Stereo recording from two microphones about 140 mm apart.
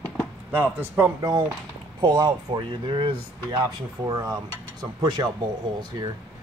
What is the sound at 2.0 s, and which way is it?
Speech, 30° right (ahead or behind).